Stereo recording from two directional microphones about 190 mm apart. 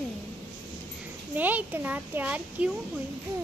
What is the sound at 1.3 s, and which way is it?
A child's voice, 10° right (ahead or behind).